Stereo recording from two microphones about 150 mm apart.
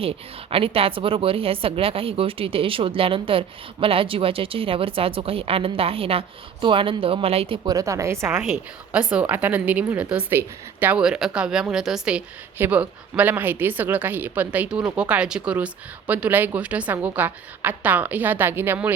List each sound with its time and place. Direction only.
0.5 s speech: 40° right (ahead or behind)
7.6 s a woman's voice: 25° right (ahead or behind)